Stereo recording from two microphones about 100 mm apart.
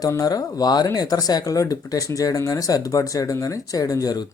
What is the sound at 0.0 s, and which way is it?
A man's voice, 40° left (ahead or behind).